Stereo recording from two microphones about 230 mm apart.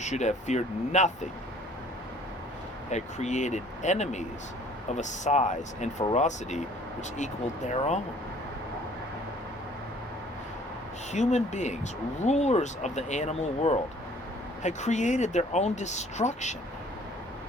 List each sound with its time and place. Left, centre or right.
0.0 s speech: left
2.9 s speech: left
11.1 s speech: left